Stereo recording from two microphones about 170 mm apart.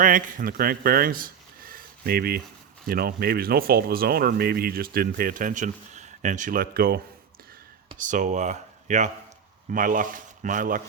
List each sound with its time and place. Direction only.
0.0 s speech: 50° right (ahead or behind)
7.9 s speech: 50° right (ahead or behind)